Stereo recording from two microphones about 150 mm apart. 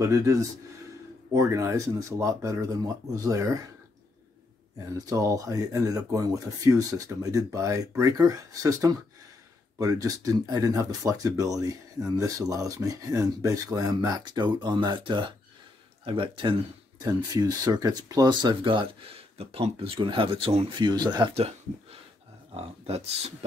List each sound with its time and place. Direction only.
0.0 s speech: 20° right (ahead or behind)
4.7 s speech: 25° right (ahead or behind); by 23.3 s 45° right (ahead or behind)